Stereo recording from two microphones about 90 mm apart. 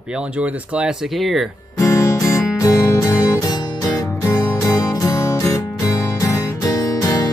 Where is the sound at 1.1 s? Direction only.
Centre (ahead or behind).